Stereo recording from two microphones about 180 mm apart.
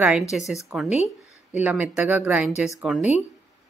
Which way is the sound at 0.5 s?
Centre (ahead or behind).